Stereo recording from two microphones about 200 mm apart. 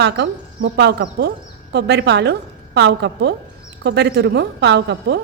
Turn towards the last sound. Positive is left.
turn(degrees=-60)  # may be behind; listen again after turning